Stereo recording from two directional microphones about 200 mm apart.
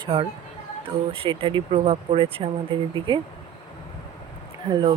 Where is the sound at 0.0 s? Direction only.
25° right (ahead or behind).